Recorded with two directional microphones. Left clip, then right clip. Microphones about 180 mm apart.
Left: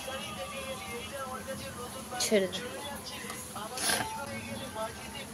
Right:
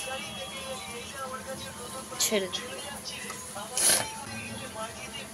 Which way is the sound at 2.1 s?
15° left (ahead or behind).